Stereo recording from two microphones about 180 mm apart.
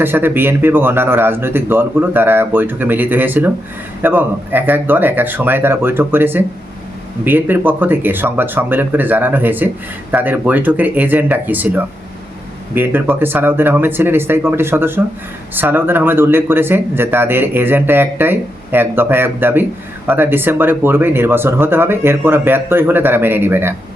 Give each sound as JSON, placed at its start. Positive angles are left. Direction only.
{"t": 0.0, "sound": "speech", "side_deg": -10}